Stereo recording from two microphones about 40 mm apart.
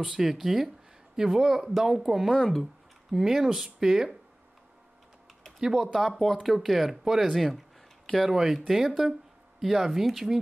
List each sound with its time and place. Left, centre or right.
0.0 s speech: centre
2.2 s speech: centre
2.6 s speech: centre
5.6 s speech: centre
5.9 s speech: centre